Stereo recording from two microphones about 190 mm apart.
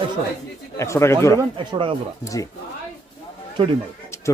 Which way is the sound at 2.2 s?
15° left (ahead or behind).